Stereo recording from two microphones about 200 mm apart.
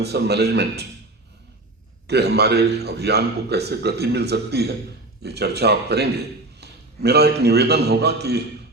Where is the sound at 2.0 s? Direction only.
55° right (ahead or behind).